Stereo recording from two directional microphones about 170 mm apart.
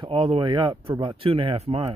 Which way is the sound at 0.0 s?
30° right (ahead or behind).